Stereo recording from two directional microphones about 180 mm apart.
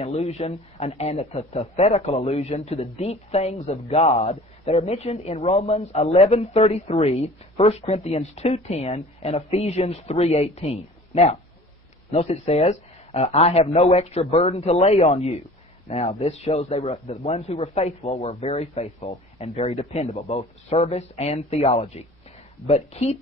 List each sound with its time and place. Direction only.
0.0 s a man's voice: 35° left (ahead or behind)